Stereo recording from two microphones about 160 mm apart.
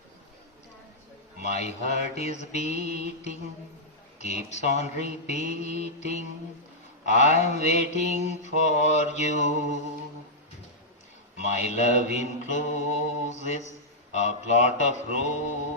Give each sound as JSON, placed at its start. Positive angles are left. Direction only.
{"t": 1.4, "sound": "mantra", "side_deg": 45}
{"t": 4.2, "sound": "mantra", "side_deg": 45}
{"t": 11.3, "sound": "mantra", "side_deg": 45}